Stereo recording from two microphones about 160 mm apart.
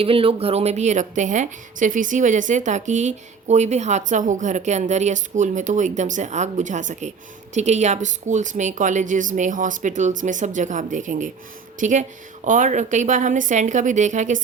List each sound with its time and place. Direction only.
0.0 s a woman's voice: 35° right (ahead or behind)